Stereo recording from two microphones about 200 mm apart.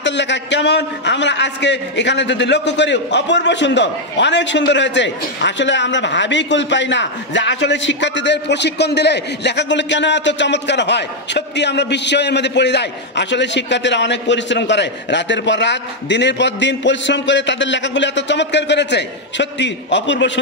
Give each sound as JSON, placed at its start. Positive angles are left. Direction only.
{"t": 0.0, "sound": "a man's voice", "side_deg": 60}